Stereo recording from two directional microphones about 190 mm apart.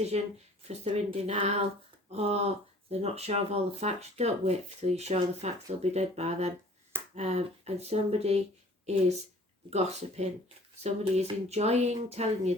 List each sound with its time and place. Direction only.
0.1 s speech: 35° right (ahead or behind)
9.6 s speech: 35° right (ahead or behind)